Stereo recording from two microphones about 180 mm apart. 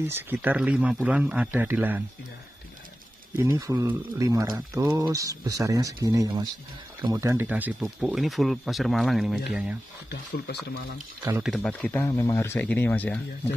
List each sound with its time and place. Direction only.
0.1 s speech: 10° right (ahead or behind)
3.3 s speech: 15° right (ahead or behind)
10.4 s speech: 70° left (ahead or behind)
11.4 s speech: 5° left (ahead or behind)